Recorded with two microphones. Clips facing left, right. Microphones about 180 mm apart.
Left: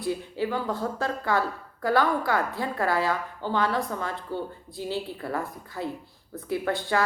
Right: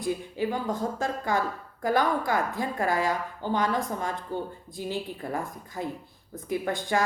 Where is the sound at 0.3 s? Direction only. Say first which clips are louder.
Even; 20° right (ahead or behind).